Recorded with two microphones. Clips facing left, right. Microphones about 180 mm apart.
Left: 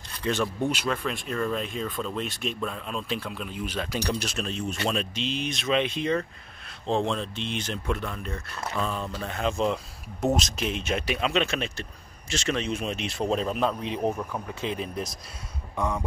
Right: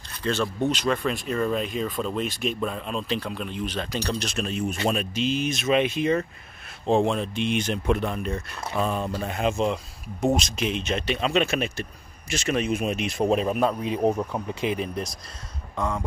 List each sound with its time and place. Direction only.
0.2 s speech: 15° left (ahead or behind)
0.7 s speech: 5° left (ahead or behind)
4.5 s speech: 10° right (ahead or behind)
10.2 s speech: 5° left (ahead or behind)
14.0 s speech: 20° right (ahead or behind)
15.7 s beatboxing: 15° left (ahead or behind)